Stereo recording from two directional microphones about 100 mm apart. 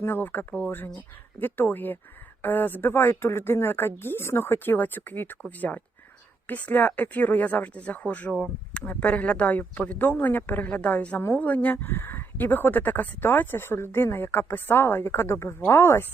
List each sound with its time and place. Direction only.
0.0 s speech: 20° left (ahead or behind)